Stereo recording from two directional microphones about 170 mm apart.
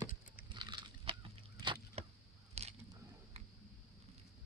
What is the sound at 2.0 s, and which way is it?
Chop, 40° right (ahead or behind).